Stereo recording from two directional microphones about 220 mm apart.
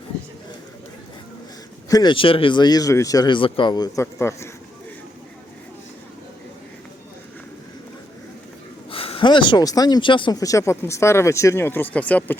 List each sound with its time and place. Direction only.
1.9 s speech: 20° left (ahead or behind)
8.9 s speech: 25° left (ahead or behind); by 12.4 s 5° left (ahead or behind)